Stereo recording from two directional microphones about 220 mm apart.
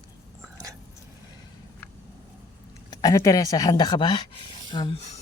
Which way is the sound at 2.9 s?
15° left (ahead or behind).